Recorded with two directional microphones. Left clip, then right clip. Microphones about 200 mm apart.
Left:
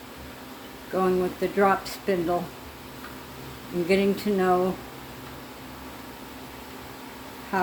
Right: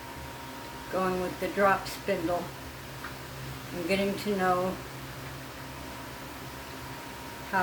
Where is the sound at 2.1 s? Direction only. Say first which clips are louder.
Left 5 dB; 35° left (ahead or behind).